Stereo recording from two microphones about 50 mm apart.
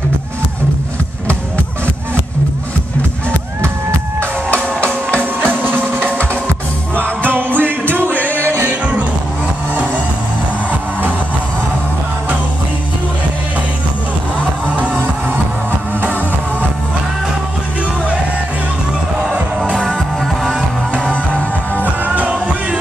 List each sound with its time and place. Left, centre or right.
4.2 s music: left
5.1 s music: right
8.1 s music: left
8.6 s music: right
21.8 s music: right